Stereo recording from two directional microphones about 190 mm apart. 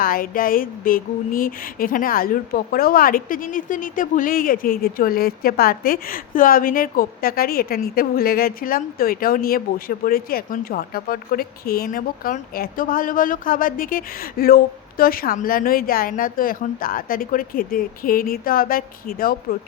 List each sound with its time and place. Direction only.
0.0 s speech: 50° left (ahead or behind)